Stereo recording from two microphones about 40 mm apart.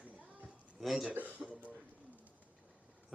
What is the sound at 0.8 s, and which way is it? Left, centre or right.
Speech, centre.